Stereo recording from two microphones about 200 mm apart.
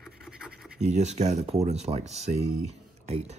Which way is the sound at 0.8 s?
35° right (ahead or behind).